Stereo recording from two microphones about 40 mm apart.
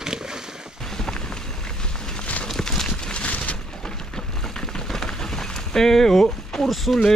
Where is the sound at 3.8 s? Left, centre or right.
Centre.